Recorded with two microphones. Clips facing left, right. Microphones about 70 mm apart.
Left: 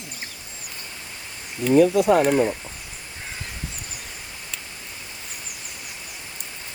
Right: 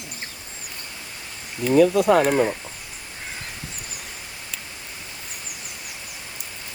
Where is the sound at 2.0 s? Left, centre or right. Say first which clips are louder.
Even; right.